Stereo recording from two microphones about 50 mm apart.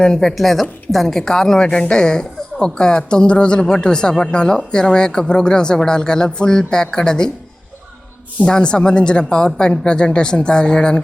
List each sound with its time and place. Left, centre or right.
0.0 s a woman's voice: centre
8.4 s speech: centre